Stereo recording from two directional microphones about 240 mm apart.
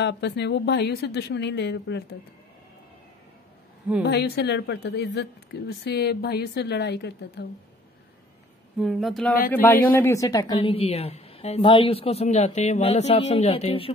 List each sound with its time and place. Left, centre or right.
0.0 s a woman's voice: left
4.0 s a woman's voice: left
8.7 s a man's voice: centre; by 13.9 s left